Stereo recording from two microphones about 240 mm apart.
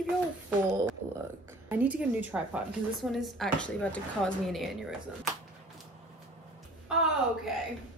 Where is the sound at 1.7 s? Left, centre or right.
Centre.